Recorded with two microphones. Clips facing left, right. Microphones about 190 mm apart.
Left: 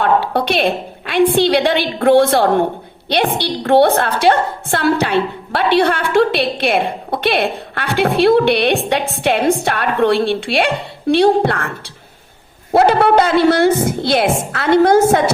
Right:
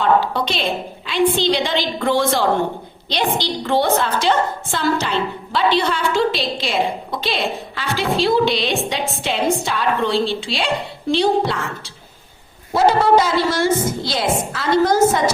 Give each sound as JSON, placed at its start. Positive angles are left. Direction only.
{"t": 0.0, "sound": "a woman's voice", "side_deg": 60}
{"t": 12.7, "sound": "a woman's voice", "side_deg": 60}